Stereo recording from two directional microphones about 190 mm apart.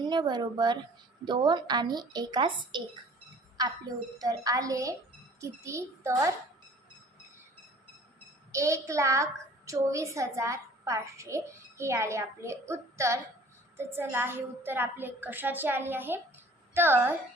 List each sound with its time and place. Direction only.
0.0 s a woman's voice: 25° right (ahead or behind)
4.2 s a woman's voice: 20° right (ahead or behind)
8.5 s a woman's voice: 15° right (ahead or behind)